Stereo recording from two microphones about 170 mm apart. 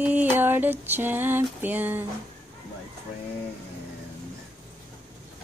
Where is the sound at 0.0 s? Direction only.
10° right (ahead or behind).